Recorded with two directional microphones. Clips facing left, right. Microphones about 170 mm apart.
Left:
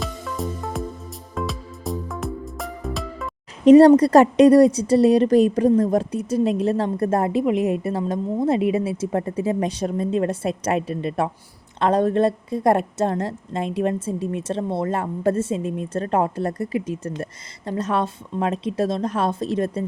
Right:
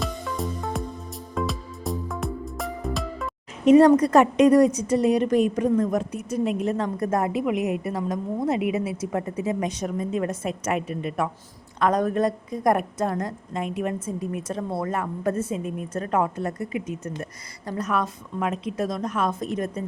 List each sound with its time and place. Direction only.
0.0 s music: centre (ahead or behind)
3.7 s a woman's voice: 35° left (ahead or behind)